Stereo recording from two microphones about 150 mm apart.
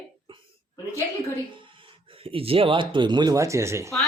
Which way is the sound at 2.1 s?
40° right (ahead or behind).